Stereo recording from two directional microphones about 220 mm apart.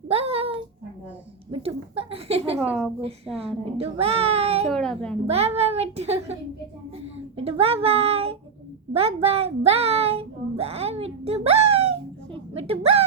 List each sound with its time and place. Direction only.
0.1 s a sound: 25° right (ahead or behind)
1.6 s a child's voice: 25° right (ahead or behind)
4.7 s a woman's voice: centre (ahead or behind)
5.2 s a child's voice: 25° right (ahead or behind)
7.3 s a child's voice: 25° right (ahead or behind)